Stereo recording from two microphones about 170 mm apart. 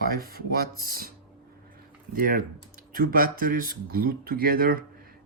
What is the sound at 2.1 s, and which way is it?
Speech, 55° right (ahead or behind).